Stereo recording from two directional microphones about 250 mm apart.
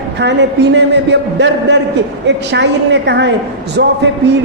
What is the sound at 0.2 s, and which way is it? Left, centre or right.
A man's voice, right.